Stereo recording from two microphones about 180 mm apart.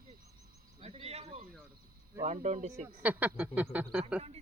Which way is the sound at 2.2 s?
40° right (ahead or behind).